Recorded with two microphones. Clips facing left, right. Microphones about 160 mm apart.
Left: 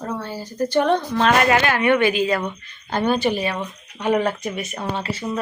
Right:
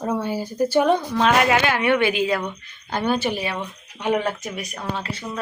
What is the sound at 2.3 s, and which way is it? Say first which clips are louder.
Speech: left 1 dB; 5° left (ahead or behind).